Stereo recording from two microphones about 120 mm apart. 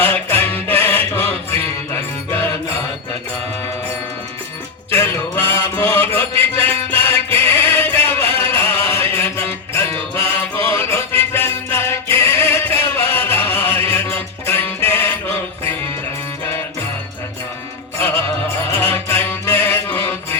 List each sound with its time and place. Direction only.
0.0 s music: 15° left (ahead or behind)
4.9 s mantra: 20° left (ahead or behind)
6.6 s music: 15° left (ahead or behind)
17.9 s music: 20° left (ahead or behind)